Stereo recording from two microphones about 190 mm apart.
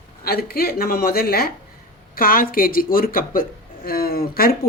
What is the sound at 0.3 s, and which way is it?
Speech, 55° left (ahead or behind).